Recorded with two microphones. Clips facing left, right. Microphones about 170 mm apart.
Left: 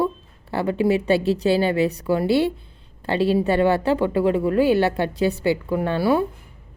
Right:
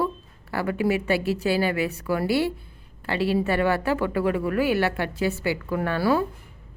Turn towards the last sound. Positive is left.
turn(degrees=20)  # may be behind; listen again after turning